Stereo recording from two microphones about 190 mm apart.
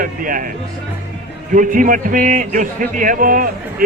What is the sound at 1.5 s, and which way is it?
A man's voice, 45° right (ahead or behind).